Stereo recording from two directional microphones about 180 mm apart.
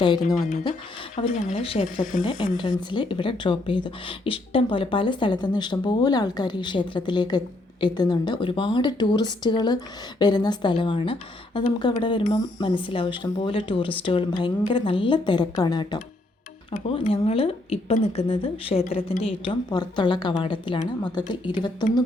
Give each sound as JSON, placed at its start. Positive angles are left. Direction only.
{"t": 0.0, "sound": "speech", "side_deg": 25}
{"t": 1.1, "sound": "speech", "side_deg": 45}
{"t": 2.2, "sound": "speech", "side_deg": 25}